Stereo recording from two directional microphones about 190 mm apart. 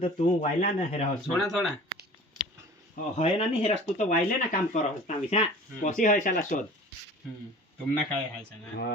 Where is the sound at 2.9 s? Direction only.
35° left (ahead or behind).